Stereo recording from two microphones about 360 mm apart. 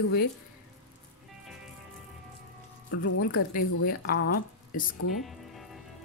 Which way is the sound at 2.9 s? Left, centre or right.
Left.